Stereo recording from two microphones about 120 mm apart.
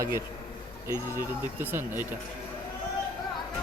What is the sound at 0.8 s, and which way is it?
Speech, 20° right (ahead or behind).